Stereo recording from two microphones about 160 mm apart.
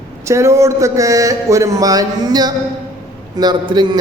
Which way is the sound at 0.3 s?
15° right (ahead or behind).